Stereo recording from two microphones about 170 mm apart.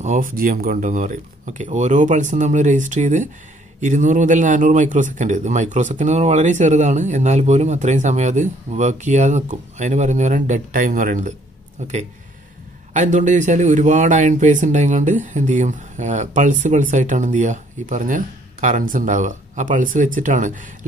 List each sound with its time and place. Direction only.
0.0 s speech: 50° right (ahead or behind)